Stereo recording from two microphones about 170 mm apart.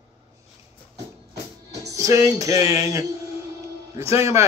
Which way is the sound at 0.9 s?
75° right (ahead or behind).